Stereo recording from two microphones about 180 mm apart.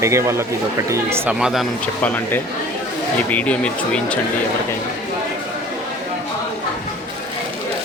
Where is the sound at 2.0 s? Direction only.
10° left (ahead or behind).